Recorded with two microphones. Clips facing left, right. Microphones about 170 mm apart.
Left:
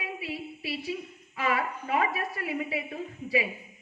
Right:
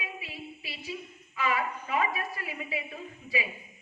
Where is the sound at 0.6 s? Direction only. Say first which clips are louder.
Left 7 dB; 65° left (ahead or behind).